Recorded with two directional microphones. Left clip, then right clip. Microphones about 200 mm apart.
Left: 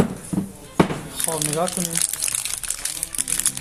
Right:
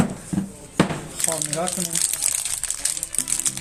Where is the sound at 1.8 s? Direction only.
Centre (ahead or behind).